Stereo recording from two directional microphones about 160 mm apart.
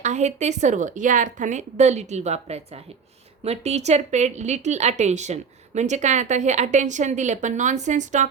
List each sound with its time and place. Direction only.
0.0 s speech: 45° right (ahead or behind)